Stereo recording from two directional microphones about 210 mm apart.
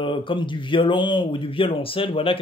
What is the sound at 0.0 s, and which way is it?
Speech, 25° left (ahead or behind).